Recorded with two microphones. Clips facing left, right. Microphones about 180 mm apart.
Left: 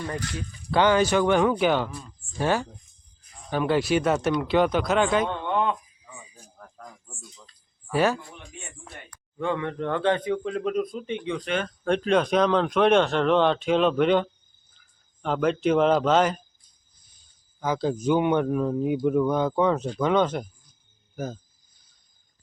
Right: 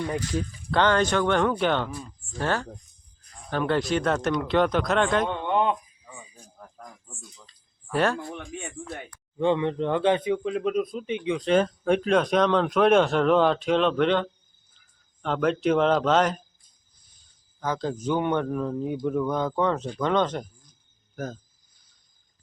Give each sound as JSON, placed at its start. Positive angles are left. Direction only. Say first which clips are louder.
{"t": 0.7, "sound": "a man's voice", "louder": "left 2 dB", "side_deg": 10}
{"t": 5.4, "sound": "a sound", "louder": "right 1 dB", "side_deg": -20}
{"t": 7.4, "sound": "a sound", "louder": "left 1 dB", "side_deg": 5}
{"t": 9.4, "sound": "speech", "louder": "right 4 dB", "side_deg": -20}
{"t": 11.4, "sound": "speech", "louder": "right 9 dB", "side_deg": -30}
{"t": 11.9, "sound": "a man's voice", "louder": "left 3 dB", "side_deg": -5}
{"t": 17.6, "sound": "speech", "louder": "left 3 dB", "side_deg": 10}